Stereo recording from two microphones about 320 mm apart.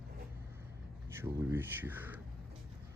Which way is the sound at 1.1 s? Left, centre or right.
Centre.